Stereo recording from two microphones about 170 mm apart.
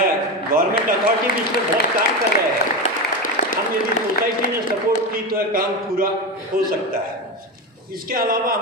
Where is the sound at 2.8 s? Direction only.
50° left (ahead or behind).